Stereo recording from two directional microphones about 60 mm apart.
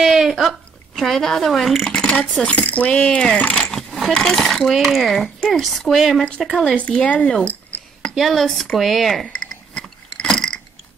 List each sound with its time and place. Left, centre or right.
0.0 s speech: centre
2.0 s cutlery: centre
2.4 s speech: left
3.7 s coin: centre
4.1 s speech: centre
8.1 s a sound: centre